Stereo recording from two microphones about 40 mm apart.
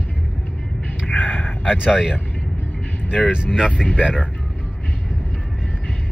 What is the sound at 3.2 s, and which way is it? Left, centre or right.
Speech, right.